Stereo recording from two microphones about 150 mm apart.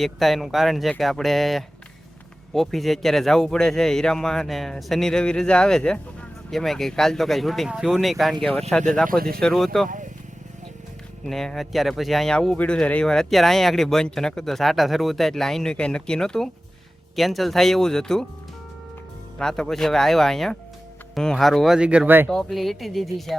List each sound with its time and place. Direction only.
0.0 s speech: centre (ahead or behind)
11.3 s speech: centre (ahead or behind)
19.4 s speech: 5° left (ahead or behind); by 22.3 s 10° right (ahead or behind)
22.3 s speech: centre (ahead or behind)